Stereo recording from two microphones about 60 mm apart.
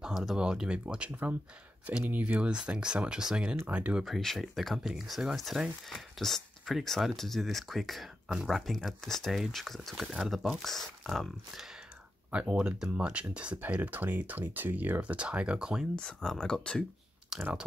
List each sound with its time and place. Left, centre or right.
0.0 s speech: centre; by 2.5 s right
2.5 s speech: centre
3.6 s speech: right
3.9 s speech: centre
10.0 s speech: centre
10.3 s speech: centre
12.3 s speech: right
16.0 s speech: centre
17.3 s speech: centre